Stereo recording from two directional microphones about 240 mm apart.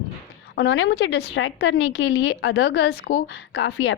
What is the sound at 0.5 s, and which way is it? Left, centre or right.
A woman's voice, left.